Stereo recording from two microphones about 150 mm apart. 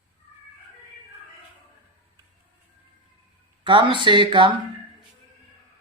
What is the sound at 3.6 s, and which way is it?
Speech, 35° right (ahead or behind).